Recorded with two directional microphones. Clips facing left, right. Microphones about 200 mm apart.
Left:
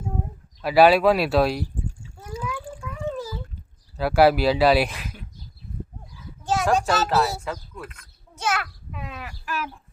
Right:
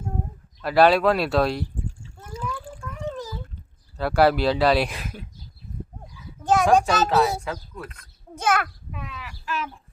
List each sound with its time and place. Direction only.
0.6 s speech: 5° left (ahead or behind)
2.1 s splash: 5° left (ahead or behind)
2.8 s a sound: centre (ahead or behind)
3.9 s speech: 5° left (ahead or behind)
6.4 s a sound: 55° right (ahead or behind)
6.8 s speech: centre (ahead or behind)
7.9 s a child's voice: 35° right (ahead or behind)
8.4 s a child's voice: 55° right (ahead or behind)
9.0 s bird: 50° left (ahead or behind)